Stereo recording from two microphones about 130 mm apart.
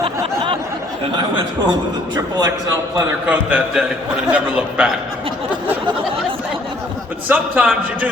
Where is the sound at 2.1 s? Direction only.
30° right (ahead or behind).